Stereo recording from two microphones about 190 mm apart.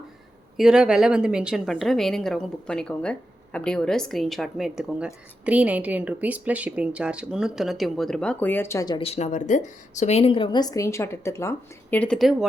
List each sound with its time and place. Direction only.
0.5 s a woman's voice: 5° right (ahead or behind); by 9.0 s 15° left (ahead or behind)
9.0 s a woman's voice: 35° left (ahead or behind); by 12.5 s centre (ahead or behind)